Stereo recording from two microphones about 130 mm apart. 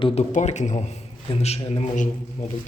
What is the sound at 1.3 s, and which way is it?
Speech, 55° left (ahead or behind).